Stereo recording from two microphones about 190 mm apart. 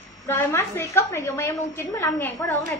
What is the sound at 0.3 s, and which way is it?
A woman's voice, 10° left (ahead or behind).